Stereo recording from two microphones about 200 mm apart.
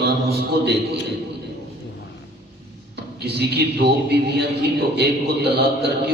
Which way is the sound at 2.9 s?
55° right (ahead or behind).